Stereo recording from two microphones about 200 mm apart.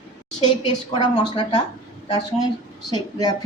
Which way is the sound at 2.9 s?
20° left (ahead or behind).